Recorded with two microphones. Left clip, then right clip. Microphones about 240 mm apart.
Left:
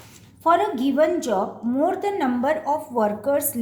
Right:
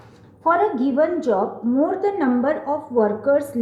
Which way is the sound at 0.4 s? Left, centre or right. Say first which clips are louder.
Right 1 dB; left.